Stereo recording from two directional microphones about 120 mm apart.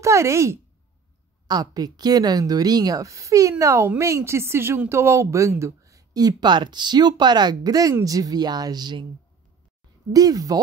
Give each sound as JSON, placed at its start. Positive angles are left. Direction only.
{"t": 0.0, "sound": "a woman's voice", "side_deg": -25}
{"t": 10.1, "sound": "a woman's voice", "side_deg": -30}